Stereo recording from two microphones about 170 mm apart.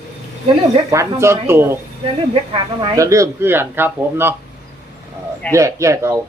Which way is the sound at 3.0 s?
20° right (ahead or behind).